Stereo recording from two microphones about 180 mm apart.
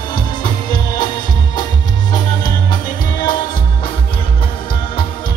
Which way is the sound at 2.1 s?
20° left (ahead or behind).